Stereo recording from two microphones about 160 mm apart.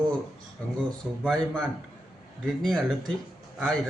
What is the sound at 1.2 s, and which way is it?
Speech, centre (ahead or behind).